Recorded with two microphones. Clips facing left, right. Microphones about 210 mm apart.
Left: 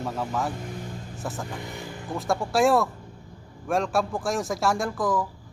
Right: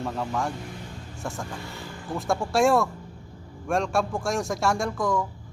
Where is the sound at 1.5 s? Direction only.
20° left (ahead or behind).